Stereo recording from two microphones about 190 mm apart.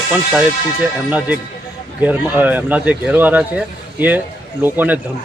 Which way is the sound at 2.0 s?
10° right (ahead or behind).